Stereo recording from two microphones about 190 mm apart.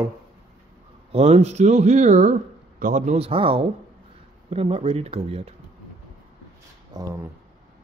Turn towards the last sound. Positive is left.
turn(degrees=-15)  # may be behind; listen again after turning